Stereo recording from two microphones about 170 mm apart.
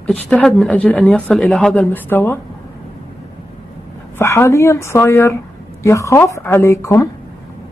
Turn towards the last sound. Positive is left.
turn(degrees=15)  # may be behind; listen again after turning